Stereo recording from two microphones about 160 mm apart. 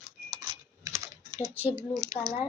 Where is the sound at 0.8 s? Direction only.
20° right (ahead or behind).